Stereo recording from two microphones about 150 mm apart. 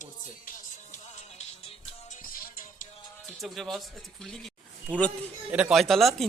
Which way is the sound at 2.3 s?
75° left (ahead or behind).